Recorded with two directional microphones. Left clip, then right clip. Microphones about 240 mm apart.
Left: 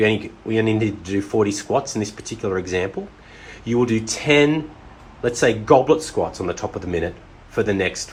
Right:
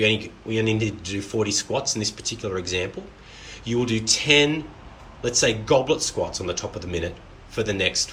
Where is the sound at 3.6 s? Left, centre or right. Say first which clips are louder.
Left 4 dB; centre.